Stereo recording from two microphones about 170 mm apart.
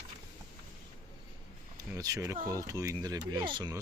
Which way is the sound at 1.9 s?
20° right (ahead or behind).